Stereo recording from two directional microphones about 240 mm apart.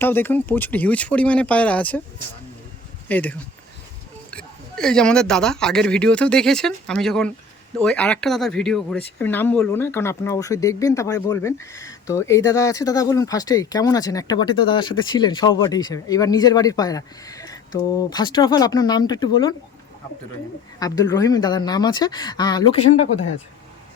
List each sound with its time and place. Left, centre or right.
0.0 s speech: centre
3.1 s speech: centre
20.7 s speech: centre